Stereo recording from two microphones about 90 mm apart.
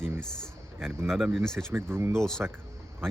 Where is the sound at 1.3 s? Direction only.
5° left (ahead or behind).